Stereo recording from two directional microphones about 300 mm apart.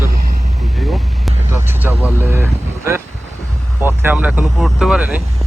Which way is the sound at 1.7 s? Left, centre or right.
Centre.